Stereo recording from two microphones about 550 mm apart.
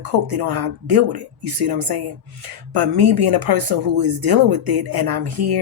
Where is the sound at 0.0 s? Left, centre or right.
Right.